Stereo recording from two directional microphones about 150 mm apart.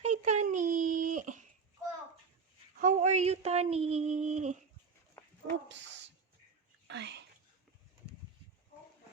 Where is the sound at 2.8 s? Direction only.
55° right (ahead or behind).